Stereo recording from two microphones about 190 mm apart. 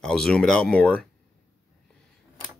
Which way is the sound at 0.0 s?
5° left (ahead or behind).